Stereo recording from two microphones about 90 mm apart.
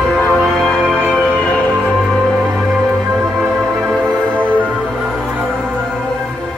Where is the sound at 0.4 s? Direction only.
5° left (ahead or behind).